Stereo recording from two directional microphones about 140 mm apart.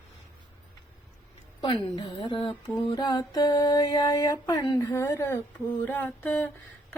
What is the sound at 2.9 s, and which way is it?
Mantra, 30° left (ahead or behind).